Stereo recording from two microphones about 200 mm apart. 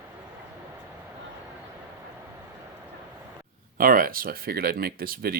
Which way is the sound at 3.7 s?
45° right (ahead or behind).